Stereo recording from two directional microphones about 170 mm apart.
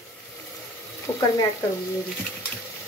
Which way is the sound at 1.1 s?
15° left (ahead or behind).